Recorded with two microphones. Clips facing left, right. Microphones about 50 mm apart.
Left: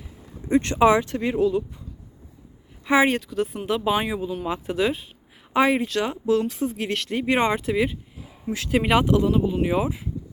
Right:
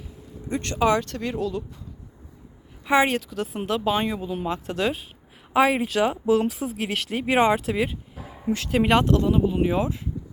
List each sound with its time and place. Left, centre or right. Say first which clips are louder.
0.4 s speech: left 5 dB; left
2.8 s speech: left 1 dB; centre